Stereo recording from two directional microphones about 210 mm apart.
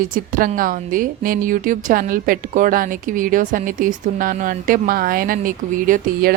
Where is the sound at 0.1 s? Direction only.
40° right (ahead or behind).